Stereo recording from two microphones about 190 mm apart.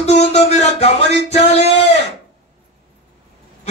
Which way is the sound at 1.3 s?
35° left (ahead or behind).